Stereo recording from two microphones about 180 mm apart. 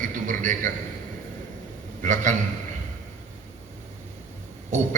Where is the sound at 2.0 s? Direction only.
45° right (ahead or behind).